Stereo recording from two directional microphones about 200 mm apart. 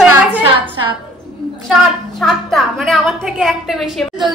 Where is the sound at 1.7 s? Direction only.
Centre (ahead or behind).